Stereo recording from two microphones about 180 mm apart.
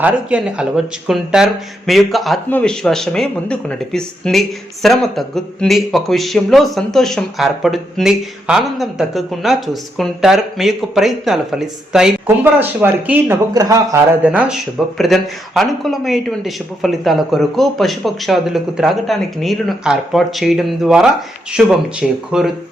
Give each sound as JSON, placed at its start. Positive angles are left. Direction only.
{"t": 0.0, "sound": "a man's voice", "side_deg": -5}
{"t": 14.3, "sound": "a man's voice", "side_deg": -5}